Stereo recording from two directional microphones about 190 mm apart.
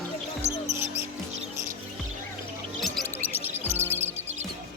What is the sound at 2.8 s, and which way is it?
Music, centre (ahead or behind).